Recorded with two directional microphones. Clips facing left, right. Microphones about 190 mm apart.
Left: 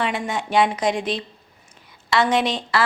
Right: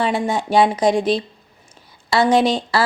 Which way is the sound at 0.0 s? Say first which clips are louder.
Right 5 dB; 35° right (ahead or behind).